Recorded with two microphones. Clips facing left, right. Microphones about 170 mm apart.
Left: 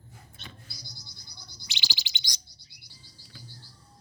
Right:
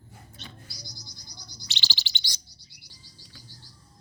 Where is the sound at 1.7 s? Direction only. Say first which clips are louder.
Right 2 dB; 15° left (ahead or behind).